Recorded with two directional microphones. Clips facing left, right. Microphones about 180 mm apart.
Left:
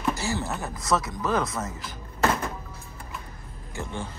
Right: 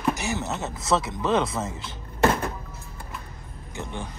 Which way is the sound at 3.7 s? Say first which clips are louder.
Even; 20° right (ahead or behind).